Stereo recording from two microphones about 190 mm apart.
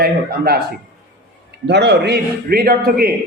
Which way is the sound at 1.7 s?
65° right (ahead or behind).